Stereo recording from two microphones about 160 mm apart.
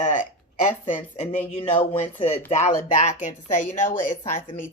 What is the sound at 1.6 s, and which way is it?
A woman's voice, 35° left (ahead or behind).